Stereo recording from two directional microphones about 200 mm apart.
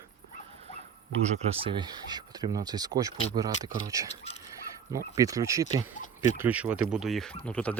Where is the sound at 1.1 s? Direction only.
35° right (ahead or behind).